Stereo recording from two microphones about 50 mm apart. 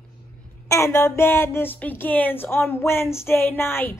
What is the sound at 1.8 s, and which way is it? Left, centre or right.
Speech, left.